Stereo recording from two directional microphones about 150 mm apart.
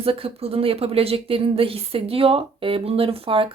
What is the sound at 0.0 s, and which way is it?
Speech, 40° right (ahead or behind).